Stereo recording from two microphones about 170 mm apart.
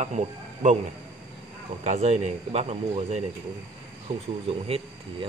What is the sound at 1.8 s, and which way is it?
A man's voice, 40° right (ahead or behind).